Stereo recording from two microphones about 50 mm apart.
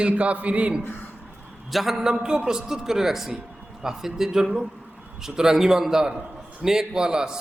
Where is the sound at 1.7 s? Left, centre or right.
Centre.